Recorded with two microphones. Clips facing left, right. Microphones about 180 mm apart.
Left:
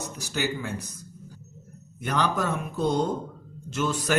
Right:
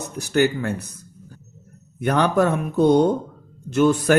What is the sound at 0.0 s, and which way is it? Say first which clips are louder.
Speech: right 10 dB; 60° right (ahead or behind).